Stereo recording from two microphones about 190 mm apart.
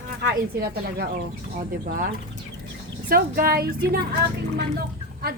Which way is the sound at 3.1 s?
50° right (ahead or behind).